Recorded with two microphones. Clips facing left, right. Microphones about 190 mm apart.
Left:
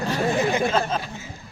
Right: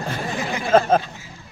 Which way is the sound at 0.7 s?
55° right (ahead or behind).